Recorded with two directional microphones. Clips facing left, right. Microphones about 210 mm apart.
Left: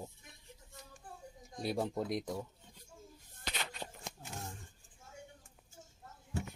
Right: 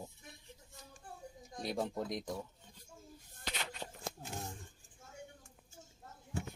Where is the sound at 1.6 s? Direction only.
10° left (ahead or behind).